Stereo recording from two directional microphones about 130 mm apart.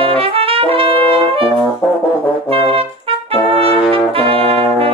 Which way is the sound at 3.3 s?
45° right (ahead or behind).